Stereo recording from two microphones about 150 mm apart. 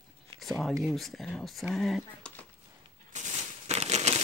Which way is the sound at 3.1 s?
50° right (ahead or behind).